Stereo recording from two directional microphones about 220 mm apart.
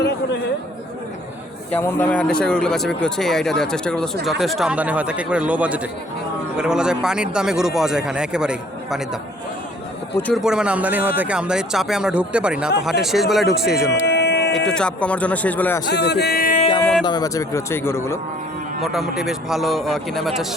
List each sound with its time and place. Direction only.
1.7 s speech: 10° left (ahead or behind)
10.2 s speech: 5° left (ahead or behind)
10.4 s speech: 5° right (ahead or behind)
14.1 s a sound: 50° left (ahead or behind)
14.5 s speech: 5° left (ahead or behind)
15.9 s speech: 50° left (ahead or behind)
17.1 s speech: 15° left (ahead or behind)
18.8 s speech: centre (ahead or behind)